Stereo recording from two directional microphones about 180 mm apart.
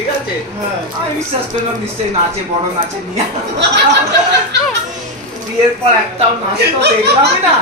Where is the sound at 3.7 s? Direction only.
70° right (ahead or behind).